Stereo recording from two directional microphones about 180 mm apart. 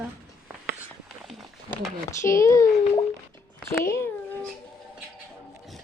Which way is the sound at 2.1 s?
15° left (ahead or behind).